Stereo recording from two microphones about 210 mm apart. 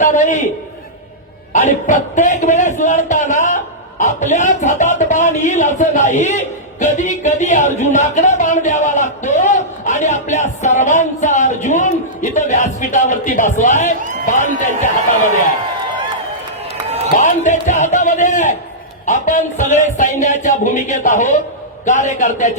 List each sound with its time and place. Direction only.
0.0 s a man's voice: 35° left (ahead or behind)
1.5 s speech: 35° left (ahead or behind)
17.2 s speech: 35° left (ahead or behind)